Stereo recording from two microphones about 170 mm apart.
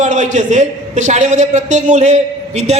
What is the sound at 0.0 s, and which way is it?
A man's voice, 45° right (ahead or behind).